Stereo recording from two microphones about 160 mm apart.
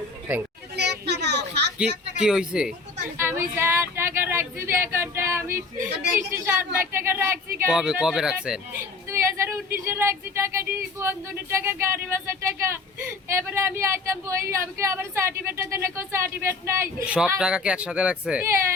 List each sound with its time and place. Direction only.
0.8 s a sound: 90° right
2.1 s a woman's voice: 5° right (ahead or behind)
9.0 s a woman's voice: 15° right (ahead or behind)